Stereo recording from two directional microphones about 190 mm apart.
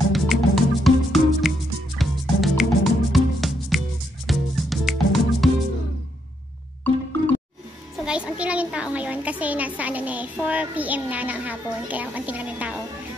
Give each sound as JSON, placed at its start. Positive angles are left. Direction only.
{"t": 0.1, "sound": "music", "side_deg": 0}
{"t": 6.8, "sound": "music", "side_deg": 10}
{"t": 8.0, "sound": "a child's voice", "side_deg": -5}